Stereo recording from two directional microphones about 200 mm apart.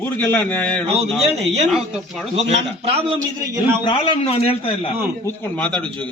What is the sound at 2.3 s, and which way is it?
Speech, 30° right (ahead or behind).